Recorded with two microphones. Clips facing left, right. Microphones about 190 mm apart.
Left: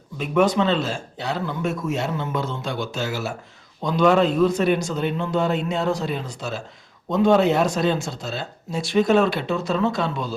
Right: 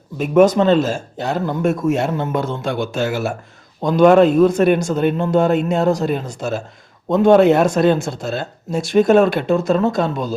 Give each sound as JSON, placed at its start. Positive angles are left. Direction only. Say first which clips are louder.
{"t": 0.2, "sound": "speech", "louder": "right 7 dB", "side_deg": -45}